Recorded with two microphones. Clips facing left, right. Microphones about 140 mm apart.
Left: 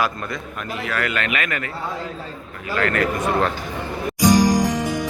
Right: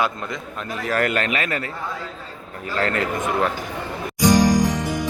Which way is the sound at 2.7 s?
30° right (ahead or behind).